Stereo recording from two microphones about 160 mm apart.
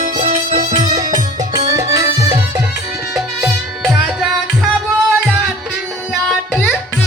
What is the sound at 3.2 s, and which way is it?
Music, 5° right (ahead or behind).